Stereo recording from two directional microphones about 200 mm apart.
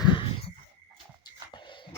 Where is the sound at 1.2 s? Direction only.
25° left (ahead or behind).